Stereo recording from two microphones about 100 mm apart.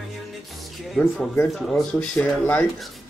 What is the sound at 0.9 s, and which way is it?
Speech, 5° left (ahead or behind).